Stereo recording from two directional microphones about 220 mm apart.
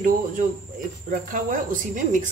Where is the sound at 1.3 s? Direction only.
35° right (ahead or behind).